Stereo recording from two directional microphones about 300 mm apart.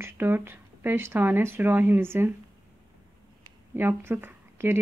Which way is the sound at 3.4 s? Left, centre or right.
Centre.